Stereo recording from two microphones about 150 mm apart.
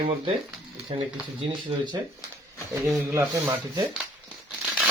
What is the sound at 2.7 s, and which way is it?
Speech, 20° right (ahead or behind).